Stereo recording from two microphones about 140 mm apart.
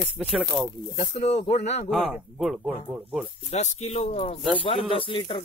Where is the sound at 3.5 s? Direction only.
50° left (ahead or behind).